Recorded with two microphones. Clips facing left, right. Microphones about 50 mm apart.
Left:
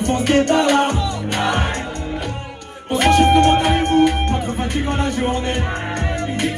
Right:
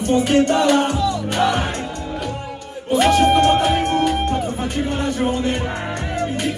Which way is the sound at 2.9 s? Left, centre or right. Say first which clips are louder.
Left 1 dB; left.